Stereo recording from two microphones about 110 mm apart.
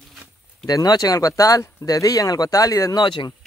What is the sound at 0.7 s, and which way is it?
Speech, 35° left (ahead or behind).